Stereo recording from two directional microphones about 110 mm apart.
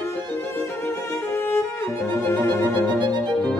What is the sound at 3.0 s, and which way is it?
Violin, 45° right (ahead or behind).